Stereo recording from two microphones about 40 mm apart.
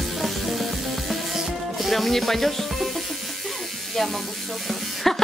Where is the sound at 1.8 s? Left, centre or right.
Centre.